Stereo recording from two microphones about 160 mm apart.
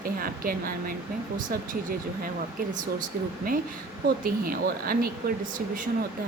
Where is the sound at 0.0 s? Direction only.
65° right (ahead or behind).